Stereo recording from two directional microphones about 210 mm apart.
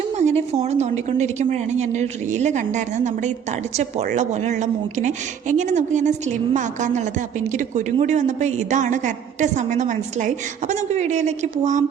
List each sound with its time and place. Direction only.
0.2 s a woman's voice: 30° right (ahead or behind)